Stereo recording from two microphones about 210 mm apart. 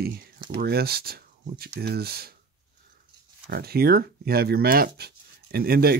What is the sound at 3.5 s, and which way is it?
Speech, 45° right (ahead or behind).